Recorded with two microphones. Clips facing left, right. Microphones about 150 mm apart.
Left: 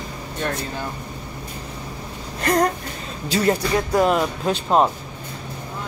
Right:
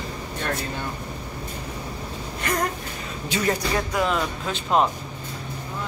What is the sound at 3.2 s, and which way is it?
Speech, 35° left (ahead or behind).